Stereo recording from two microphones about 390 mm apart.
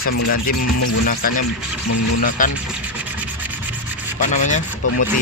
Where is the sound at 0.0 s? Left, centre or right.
Left.